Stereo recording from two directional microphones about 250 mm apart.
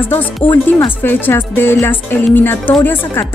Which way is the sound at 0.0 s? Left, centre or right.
Centre.